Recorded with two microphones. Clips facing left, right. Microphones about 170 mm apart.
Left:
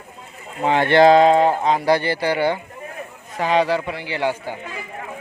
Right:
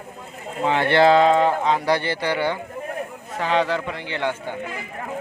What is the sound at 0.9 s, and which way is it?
Speech, 45° left (ahead or behind).